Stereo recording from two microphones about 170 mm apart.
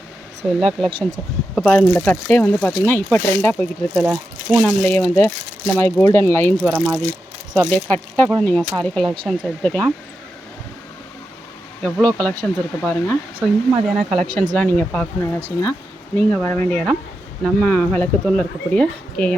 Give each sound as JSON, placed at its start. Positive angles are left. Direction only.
{"t": 0.4, "sound": "speech", "side_deg": -5}
{"t": 0.9, "sound": "speech", "side_deg": -30}
{"t": 1.5, "sound": "speech", "side_deg": 5}
{"t": 6.7, "sound": "speech", "side_deg": 0}
{"t": 7.5, "sound": "speech", "side_deg": 10}
{"t": 11.8, "sound": "speech", "side_deg": 5}